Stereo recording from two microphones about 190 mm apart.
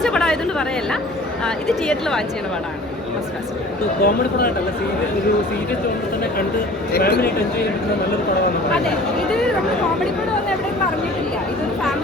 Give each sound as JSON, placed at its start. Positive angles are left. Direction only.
{"t": 0.0, "sound": "chatter", "side_deg": 5}
{"t": 1.5, "sound": "speech", "side_deg": 5}
{"t": 4.0, "sound": "speech", "side_deg": 50}
{"t": 6.9, "sound": "speech", "side_deg": 55}